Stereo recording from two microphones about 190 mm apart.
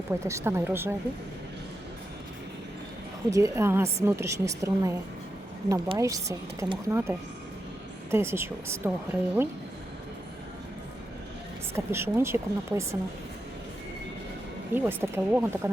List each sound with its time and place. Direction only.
0.1 s a woman's voice: 15° right (ahead or behind)
3.2 s a woman's voice: 15° right (ahead or behind)
8.1 s a woman's voice: 15° right (ahead or behind)
11.7 s a woman's voice: 15° right (ahead or behind)
14.7 s a woman's voice: 10° right (ahead or behind)